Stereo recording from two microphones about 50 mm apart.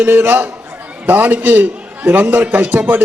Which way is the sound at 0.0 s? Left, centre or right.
Right.